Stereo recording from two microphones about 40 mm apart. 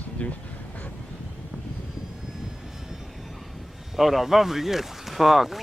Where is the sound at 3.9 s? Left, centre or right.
Centre.